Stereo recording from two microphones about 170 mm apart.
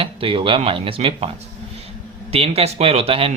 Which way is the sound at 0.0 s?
35° right (ahead or behind).